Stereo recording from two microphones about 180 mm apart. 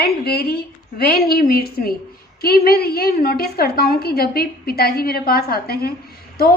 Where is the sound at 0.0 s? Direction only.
60° left (ahead or behind).